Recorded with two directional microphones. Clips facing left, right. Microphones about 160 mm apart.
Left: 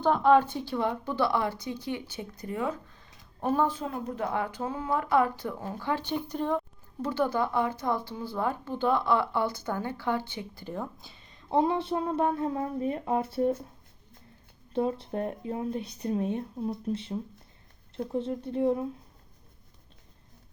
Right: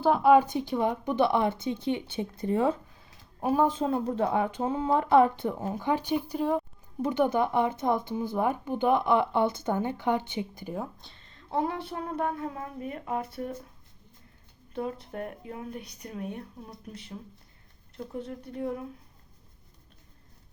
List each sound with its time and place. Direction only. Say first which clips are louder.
0.0 s speech: right 1 dB; 10° right (ahead or behind); by 2.7 s 30° right (ahead or behind)
2.9 s a sound: even; 10° right (ahead or behind)
3.8 s speech: right 6 dB; 30° right (ahead or behind); by 6.6 s 5° right (ahead or behind)
7.0 s speech: right 3 dB; 20° right (ahead or behind)
10.9 s speech: left 2 dB; 5° left (ahead or behind)
11.5 s speech: left 5 dB; 25° left (ahead or behind)
14.7 s speech: left 5 dB; 30° left (ahead or behind)